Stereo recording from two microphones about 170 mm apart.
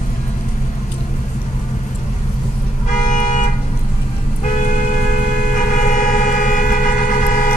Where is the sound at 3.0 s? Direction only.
50° left (ahead or behind).